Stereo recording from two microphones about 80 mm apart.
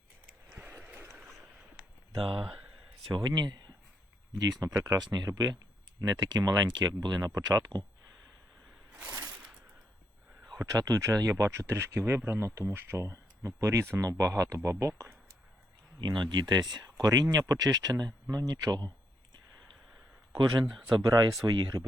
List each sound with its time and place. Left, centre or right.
0.5 s a sound: right
2.1 s speech: right
2.4 s speech: centre
3.1 s speech: right
4.7 s speech: right
4.9 s speech: right
6.7 s speech: right
10.6 s speech: right
16.0 s speech: right
20.4 s speech: right
20.7 s speech: centre
21.1 s speech: right